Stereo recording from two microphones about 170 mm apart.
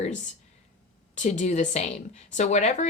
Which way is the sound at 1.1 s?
45° left (ahead or behind).